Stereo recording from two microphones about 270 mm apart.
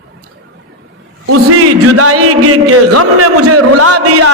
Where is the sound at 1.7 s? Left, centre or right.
Right.